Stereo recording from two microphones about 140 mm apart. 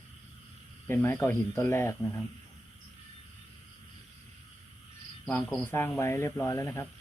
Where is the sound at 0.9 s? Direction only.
15° left (ahead or behind).